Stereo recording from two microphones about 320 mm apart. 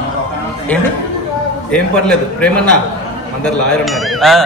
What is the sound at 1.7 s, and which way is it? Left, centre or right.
Speech, centre.